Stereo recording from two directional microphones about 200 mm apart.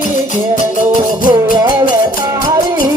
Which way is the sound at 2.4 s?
20° right (ahead or behind).